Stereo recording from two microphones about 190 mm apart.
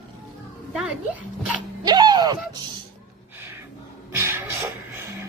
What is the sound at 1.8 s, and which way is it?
Speech, 20° right (ahead or behind).